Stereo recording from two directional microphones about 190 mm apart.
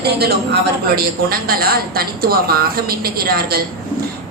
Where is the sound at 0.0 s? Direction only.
55° right (ahead or behind).